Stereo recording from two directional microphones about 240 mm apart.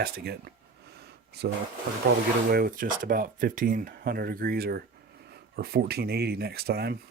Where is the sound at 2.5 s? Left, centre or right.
Right.